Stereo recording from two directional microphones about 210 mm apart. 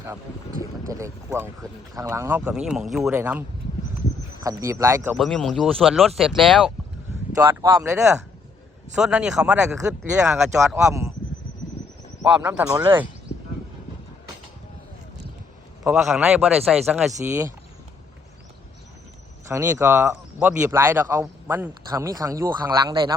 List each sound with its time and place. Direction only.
0.9 s speech: 15° right (ahead or behind)
4.4 s speech: 15° right (ahead or behind)
5.1 s speech: centre (ahead or behind)
7.4 s speech: 15° right (ahead or behind)
9.0 s speech: 5° right (ahead or behind)
9.7 s speech: 15° right (ahead or behind)
10.2 s speech: centre (ahead or behind)
12.2 s speech: 10° right (ahead or behind)
15.8 s speech: centre (ahead or behind)
19.5 s speech: 15° right (ahead or behind)